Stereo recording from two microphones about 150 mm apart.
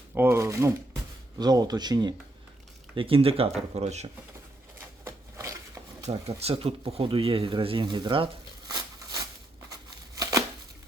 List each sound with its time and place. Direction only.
0.1 s speech: 15° right (ahead or behind); by 4.1 s 50° right (ahead or behind)
5.0 s a sound: 20° right (ahead or behind)
6.1 s speech: 45° right (ahead or behind); by 9.2 s 25° right (ahead or behind)